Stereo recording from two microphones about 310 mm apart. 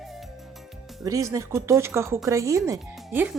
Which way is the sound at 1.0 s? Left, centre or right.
Centre.